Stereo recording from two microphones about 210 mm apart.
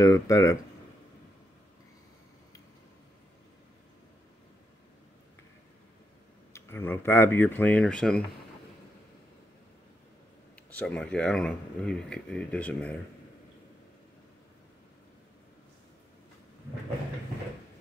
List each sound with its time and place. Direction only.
0.0 s speech: 15° left (ahead or behind)
6.5 s speech: 10° left (ahead or behind)
10.8 s speech: 5° left (ahead or behind)